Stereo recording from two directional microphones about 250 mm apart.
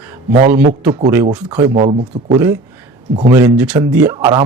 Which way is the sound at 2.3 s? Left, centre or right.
Centre.